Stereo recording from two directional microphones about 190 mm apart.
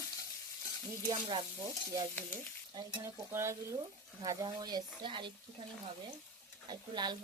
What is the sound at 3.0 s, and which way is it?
Frying, 15° right (ahead or behind).